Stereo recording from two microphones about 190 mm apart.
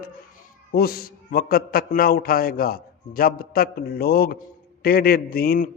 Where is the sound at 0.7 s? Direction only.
55° left (ahead or behind).